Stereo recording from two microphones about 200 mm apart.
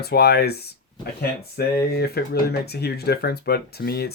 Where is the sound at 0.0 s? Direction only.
50° left (ahead or behind).